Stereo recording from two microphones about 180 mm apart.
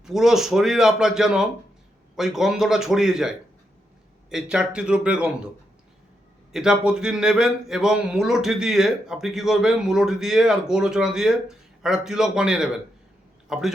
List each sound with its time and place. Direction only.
0.0 s speech: centre (ahead or behind)
6.5 s speech: 5° right (ahead or behind)